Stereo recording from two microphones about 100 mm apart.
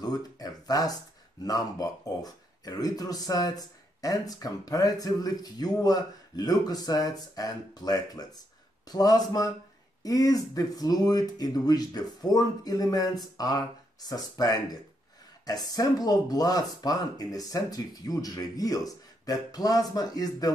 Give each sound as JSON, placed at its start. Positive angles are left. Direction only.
{"t": 0.0, "sound": "speech", "side_deg": 40}